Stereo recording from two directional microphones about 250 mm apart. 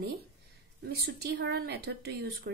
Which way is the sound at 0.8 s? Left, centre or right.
Right.